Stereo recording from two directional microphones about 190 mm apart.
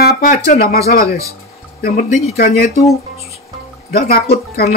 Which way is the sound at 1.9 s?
35° left (ahead or behind).